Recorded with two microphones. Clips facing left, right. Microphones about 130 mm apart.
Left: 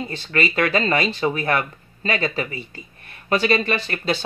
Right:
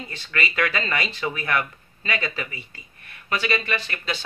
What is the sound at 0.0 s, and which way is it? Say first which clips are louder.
Speech: left 6 dB; 30° left (ahead or behind).